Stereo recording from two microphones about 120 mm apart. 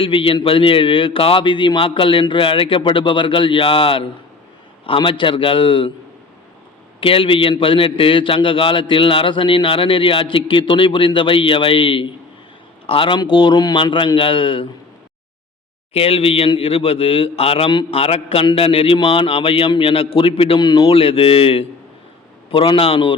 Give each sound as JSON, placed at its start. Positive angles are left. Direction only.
{"t": 0.0, "sound": "a man's voice", "side_deg": 45}
{"t": 7.0, "sound": "a man's voice", "side_deg": 50}
{"t": 15.9, "sound": "a man's voice", "side_deg": 55}